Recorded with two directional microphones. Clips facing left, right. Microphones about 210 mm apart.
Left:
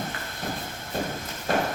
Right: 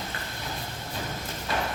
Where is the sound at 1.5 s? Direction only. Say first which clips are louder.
Left 6 dB; 50° left (ahead or behind).